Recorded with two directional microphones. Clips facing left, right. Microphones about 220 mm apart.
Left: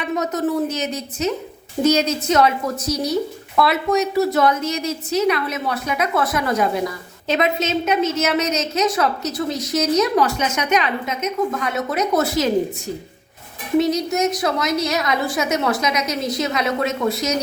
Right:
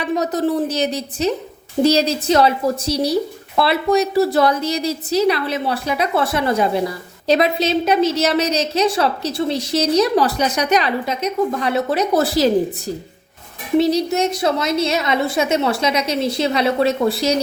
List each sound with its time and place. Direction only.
0.0 s speech: 35° right (ahead or behind)
13.7 s a woman's voice: 30° right (ahead or behind)